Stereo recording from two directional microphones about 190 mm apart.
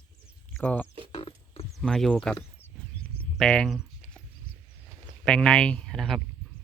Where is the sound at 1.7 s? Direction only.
Centre (ahead or behind).